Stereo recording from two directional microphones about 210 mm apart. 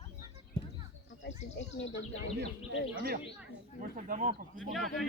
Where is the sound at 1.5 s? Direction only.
60° left (ahead or behind).